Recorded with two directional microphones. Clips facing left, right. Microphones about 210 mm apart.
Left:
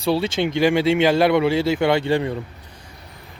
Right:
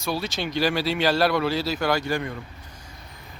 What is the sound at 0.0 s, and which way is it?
Speech, 25° left (ahead or behind).